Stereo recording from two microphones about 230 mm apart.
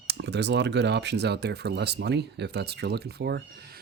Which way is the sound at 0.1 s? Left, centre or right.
Right.